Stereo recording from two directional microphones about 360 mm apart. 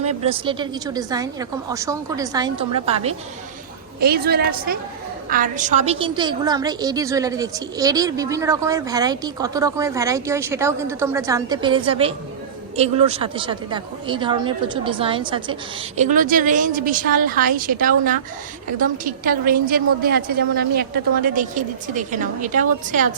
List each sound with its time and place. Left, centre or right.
0.0 s a woman's voice: centre